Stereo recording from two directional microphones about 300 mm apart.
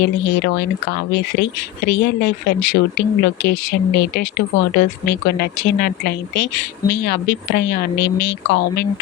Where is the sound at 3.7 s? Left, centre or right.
Left.